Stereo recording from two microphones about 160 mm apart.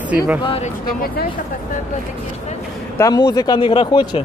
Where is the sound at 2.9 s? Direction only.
20° left (ahead or behind).